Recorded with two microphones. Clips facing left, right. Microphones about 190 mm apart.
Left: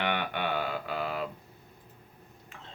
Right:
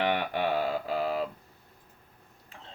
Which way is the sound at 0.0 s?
35° right (ahead or behind).